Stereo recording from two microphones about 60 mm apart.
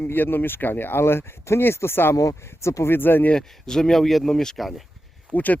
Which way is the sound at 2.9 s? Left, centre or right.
Left.